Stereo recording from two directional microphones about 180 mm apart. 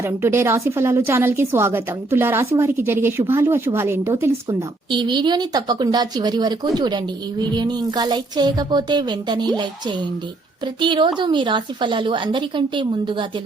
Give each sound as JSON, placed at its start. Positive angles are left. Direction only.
{"t": 0.0, "sound": "a woman's voice", "side_deg": -15}
{"t": 4.9, "sound": "speech", "side_deg": -25}